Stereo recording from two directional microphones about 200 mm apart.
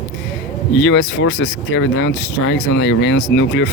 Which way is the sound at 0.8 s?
70° left (ahead or behind).